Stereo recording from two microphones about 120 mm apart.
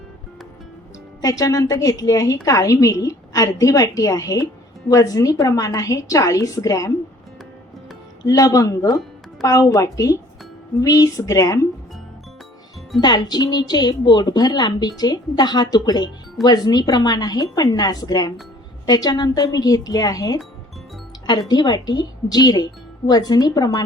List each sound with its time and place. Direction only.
1.2 s a woman's voice: 30° left (ahead or behind)
8.3 s a woman's voice: 30° left (ahead or behind)
13.0 s a woman's voice: 35° left (ahead or behind)